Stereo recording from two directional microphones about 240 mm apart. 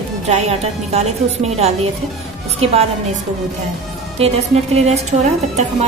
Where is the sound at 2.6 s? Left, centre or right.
Right.